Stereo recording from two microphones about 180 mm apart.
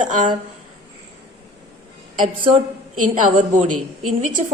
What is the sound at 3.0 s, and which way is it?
Speech, 45° right (ahead or behind).